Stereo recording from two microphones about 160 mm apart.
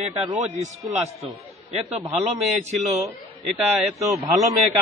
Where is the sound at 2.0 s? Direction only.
45° right (ahead or behind).